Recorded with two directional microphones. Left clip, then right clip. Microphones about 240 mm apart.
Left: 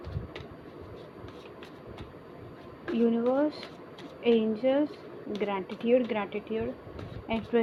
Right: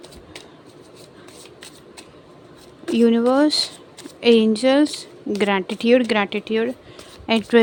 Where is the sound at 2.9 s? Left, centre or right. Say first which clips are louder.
Right 10 dB; right.